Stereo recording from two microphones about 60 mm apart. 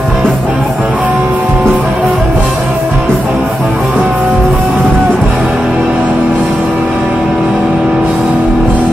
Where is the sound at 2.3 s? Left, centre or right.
Right; by 3.8 s centre.